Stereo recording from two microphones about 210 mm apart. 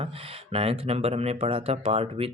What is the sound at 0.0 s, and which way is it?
Speech, 25° right (ahead or behind).